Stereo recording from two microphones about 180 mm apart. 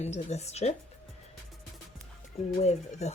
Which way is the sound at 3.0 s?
40° left (ahead or behind).